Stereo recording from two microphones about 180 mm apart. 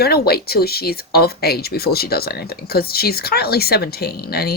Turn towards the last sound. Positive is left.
turn(degrees=60)  # may be behind; listen again after turning